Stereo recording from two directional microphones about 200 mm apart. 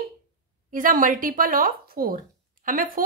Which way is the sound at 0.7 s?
40° right (ahead or behind).